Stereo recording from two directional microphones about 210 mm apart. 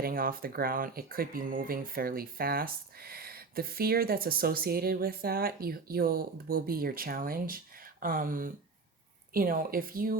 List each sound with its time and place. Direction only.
0.0 s speech: 45° right (ahead or behind)